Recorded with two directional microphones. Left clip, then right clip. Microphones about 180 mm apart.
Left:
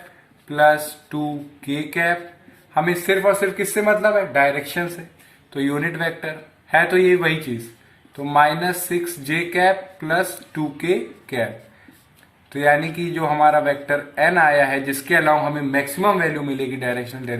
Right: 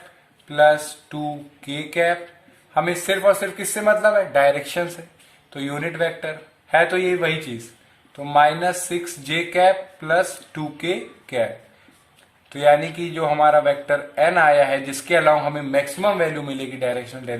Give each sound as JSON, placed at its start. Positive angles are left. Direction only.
{"t": 0.4, "sound": "a sound", "side_deg": -45}
{"t": 1.6, "sound": "a man's voice", "side_deg": -45}
{"t": 12.5, "sound": "a man's voice", "side_deg": -45}